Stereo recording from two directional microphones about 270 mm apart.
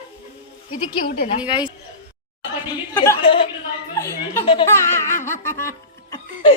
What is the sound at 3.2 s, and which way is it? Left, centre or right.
A woman's voice, centre.